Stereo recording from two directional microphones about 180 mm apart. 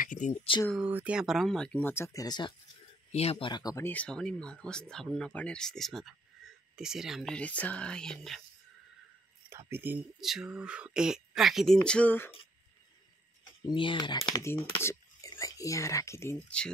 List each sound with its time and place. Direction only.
0.0 s speech: 45° left (ahead or behind)
0.7 s speech: 10° right (ahead or behind); by 2.0 s 10° left (ahead or behind)
2.1 s speech: 20° left (ahead or behind)
3.1 s speech: 35° left (ahead or behind); by 8.4 s 5° left (ahead or behind)
9.5 s speech: 15° right (ahead or behind); by 12.3 s 10° left (ahead or behind)
13.4 s speech: 25° left (ahead or behind); by 16.7 s 5° left (ahead or behind)